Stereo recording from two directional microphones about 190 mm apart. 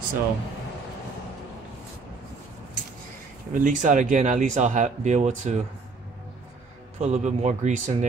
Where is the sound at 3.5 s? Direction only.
40° right (ahead or behind).